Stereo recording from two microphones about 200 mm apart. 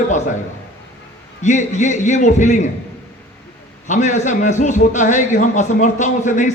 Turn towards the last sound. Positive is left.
turn(degrees=40)  # may be behind; listen again after turning